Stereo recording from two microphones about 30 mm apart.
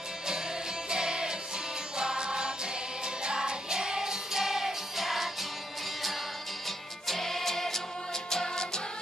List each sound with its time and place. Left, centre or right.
0.8 s music: right; by 5.3 s centre
7.1 s music: centre